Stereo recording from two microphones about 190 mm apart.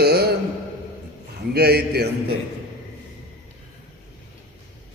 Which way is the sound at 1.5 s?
60° right (ahead or behind).